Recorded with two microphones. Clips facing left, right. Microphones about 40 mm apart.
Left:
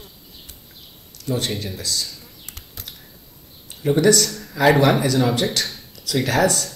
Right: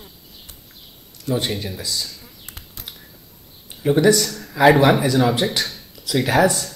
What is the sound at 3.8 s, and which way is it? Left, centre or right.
Speech, centre.